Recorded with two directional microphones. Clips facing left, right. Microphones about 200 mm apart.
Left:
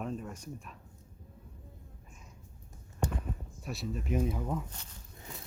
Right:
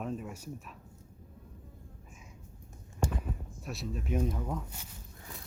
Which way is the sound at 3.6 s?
Centre (ahead or behind).